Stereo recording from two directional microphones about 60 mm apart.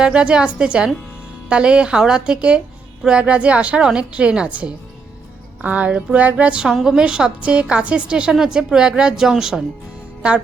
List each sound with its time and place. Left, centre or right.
0.0 s a woman's voice: centre